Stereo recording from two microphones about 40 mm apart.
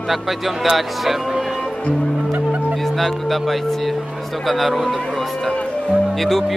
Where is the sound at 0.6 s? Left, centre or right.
Centre.